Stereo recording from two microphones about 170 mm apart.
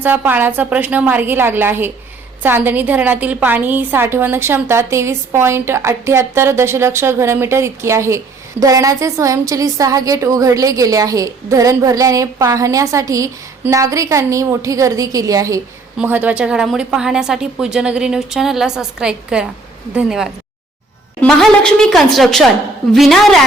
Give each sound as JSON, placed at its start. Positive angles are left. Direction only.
{"t": 0.0, "sound": "a woman's voice", "side_deg": -10}